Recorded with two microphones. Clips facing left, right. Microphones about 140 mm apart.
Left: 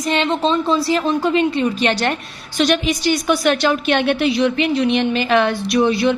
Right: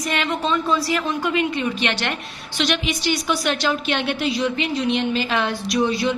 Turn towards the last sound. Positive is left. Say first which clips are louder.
# left 5 dB
turn(degrees=65)  # may be behind; listen again after turning